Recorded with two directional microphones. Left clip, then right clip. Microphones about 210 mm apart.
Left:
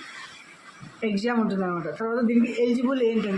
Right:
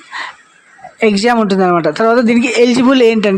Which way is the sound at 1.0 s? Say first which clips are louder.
Right 15 dB; 50° right (ahead or behind).